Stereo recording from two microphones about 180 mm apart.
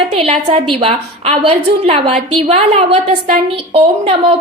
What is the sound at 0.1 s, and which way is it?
A woman's voice, 30° right (ahead or behind).